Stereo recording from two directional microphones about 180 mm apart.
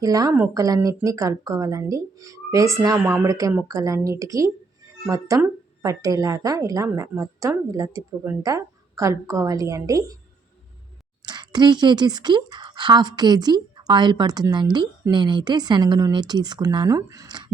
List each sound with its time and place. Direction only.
0.0 s a woman's voice: 20° right (ahead or behind)
11.2 s speech: 25° right (ahead or behind)